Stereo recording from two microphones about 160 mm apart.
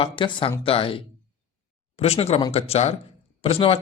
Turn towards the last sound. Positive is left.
turn(degrees=35)  # may be behind; listen again after turning